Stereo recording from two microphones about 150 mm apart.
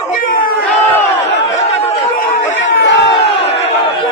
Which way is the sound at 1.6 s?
45° left (ahead or behind).